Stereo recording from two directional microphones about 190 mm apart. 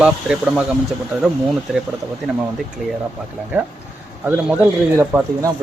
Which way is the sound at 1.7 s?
Centre (ahead or behind).